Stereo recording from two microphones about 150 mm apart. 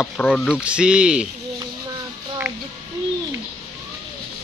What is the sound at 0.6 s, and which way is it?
Speech, 5° right (ahead or behind).